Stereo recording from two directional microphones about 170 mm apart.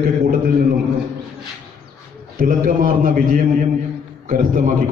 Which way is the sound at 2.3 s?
60° right (ahead or behind).